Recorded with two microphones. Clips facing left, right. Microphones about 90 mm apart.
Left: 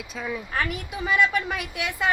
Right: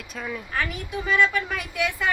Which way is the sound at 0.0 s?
5° left (ahead or behind).